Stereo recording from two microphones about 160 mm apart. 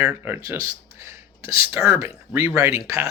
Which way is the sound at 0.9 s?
20° right (ahead or behind).